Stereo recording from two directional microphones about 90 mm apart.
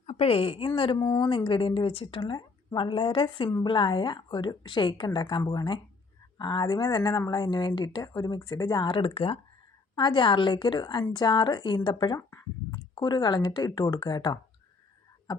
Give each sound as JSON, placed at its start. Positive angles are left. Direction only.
{"t": 0.3, "sound": "a woman's voice", "side_deg": 90}
{"t": 0.9, "sound": "a woman's voice", "side_deg": 60}
{"t": 1.5, "sound": "a woman's voice", "side_deg": 75}
{"t": 9.9, "sound": "a woman's voice", "side_deg": 60}